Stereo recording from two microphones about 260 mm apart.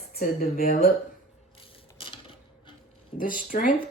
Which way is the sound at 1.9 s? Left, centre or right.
Centre.